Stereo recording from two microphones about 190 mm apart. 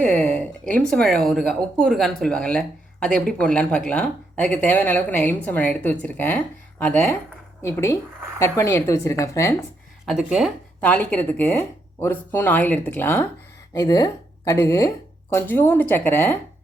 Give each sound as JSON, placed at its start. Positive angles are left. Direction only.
{"t": 0.0, "sound": "speech", "side_deg": 5}
{"t": 10.1, "sound": "speech", "side_deg": -5}
{"t": 10.8, "sound": "speech", "side_deg": 10}